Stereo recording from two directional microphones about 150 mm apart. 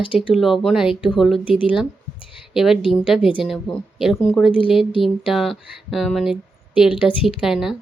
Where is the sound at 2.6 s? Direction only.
5° right (ahead or behind).